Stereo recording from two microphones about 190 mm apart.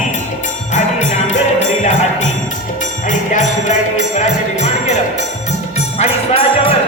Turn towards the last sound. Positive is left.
turn(degrees=30)  # may be behind; listen again after turning